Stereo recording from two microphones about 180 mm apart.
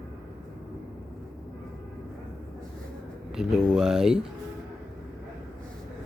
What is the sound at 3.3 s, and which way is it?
Speech, 5° right (ahead or behind).